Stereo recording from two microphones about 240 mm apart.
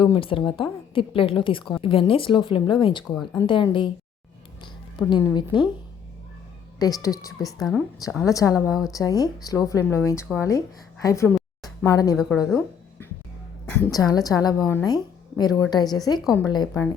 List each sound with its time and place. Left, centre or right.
0.0 s a woman's voice: left
5.0 s a woman's voice: centre
6.7 s speech: centre
11.3 s a sound: centre
12.1 s a woman's voice: centre
13.7 s speech: centre